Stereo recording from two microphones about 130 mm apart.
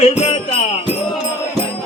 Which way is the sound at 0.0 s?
55° left (ahead or behind).